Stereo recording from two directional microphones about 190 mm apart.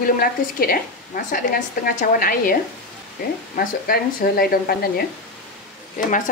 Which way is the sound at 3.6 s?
50° left (ahead or behind).